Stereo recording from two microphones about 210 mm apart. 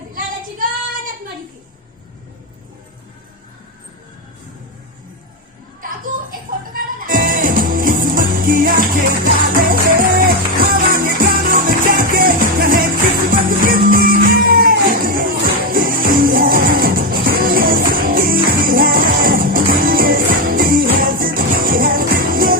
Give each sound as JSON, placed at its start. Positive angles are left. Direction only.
{"t": 6.3, "sound": "music", "side_deg": -40}